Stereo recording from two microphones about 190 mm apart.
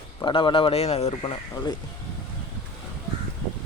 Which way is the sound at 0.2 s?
25° left (ahead or behind).